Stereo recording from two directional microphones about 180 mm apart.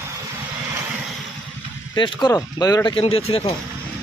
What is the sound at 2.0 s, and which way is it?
Speech, 25° left (ahead or behind).